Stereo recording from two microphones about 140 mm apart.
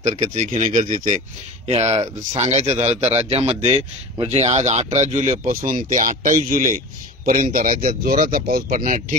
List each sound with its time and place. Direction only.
0.0 s speech: 60° right (ahead or behind)
1.7 s a man's voice: 50° right (ahead or behind)
5.7 s speech: 65° right (ahead or behind)
6.5 s speech: 75° right (ahead or behind)